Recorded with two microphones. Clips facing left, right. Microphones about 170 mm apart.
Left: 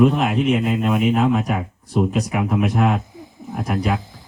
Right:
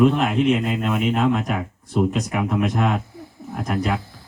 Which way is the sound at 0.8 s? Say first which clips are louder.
Left 3 dB; 10° left (ahead or behind).